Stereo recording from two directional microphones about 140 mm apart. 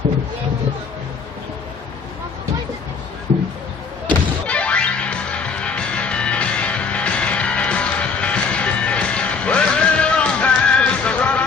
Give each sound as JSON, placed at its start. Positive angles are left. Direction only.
{"t": 4.0, "sound": "music", "side_deg": 10}